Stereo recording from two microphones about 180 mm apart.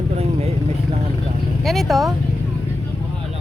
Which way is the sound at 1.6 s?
Centre (ahead or behind).